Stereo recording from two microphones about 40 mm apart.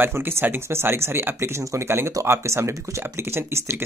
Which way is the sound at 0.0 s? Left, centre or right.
Right.